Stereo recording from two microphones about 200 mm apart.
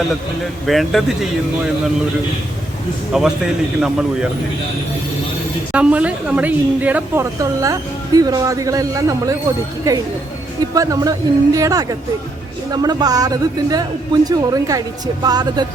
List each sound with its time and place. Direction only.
0.6 s speech: centre (ahead or behind)
3.1 s speech: centre (ahead or behind)
5.7 s a woman's voice: 5° right (ahead or behind)
10.8 s a woman's voice: 15° right (ahead or behind)